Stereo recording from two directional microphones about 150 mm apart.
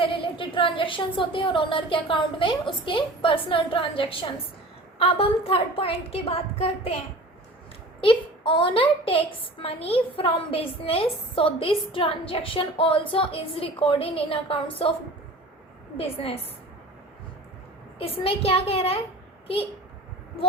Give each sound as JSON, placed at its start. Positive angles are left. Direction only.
{"t": 0.0, "sound": "a woman's voice", "side_deg": 35}
{"t": 8.0, "sound": "a woman's voice", "side_deg": 35}
{"t": 16.0, "sound": "a woman's voice", "side_deg": 40}
{"t": 18.0, "sound": "a woman's voice", "side_deg": 40}